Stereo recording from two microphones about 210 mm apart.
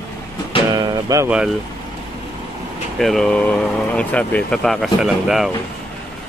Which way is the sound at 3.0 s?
Centre (ahead or behind).